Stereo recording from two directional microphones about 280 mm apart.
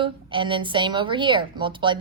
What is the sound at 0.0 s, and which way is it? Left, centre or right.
A woman's voice, centre.